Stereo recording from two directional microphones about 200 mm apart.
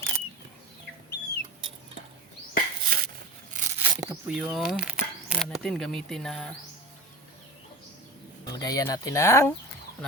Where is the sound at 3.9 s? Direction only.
15° right (ahead or behind).